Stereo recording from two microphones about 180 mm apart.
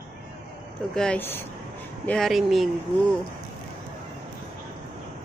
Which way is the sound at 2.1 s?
Centre (ahead or behind).